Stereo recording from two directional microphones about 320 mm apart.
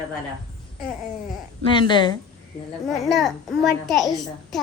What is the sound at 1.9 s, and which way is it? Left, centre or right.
Speech, centre.